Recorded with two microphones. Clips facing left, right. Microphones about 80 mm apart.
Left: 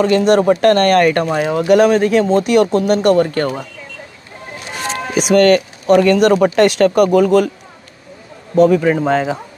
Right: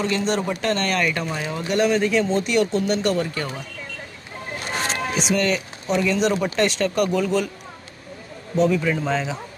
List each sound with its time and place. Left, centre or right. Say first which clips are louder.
0.0 s speech: left 11 dB; left
5.1 s speech: left 13 dB; left
8.5 s a man's voice: left 9 dB; left